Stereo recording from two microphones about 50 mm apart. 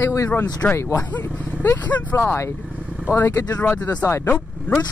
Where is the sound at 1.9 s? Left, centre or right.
Left.